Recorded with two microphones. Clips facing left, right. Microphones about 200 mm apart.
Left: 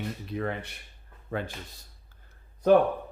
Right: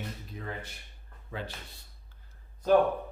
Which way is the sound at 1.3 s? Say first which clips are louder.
Left 6 dB; 50° left (ahead or behind).